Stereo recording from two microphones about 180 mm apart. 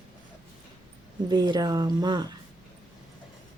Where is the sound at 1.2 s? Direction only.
25° right (ahead or behind).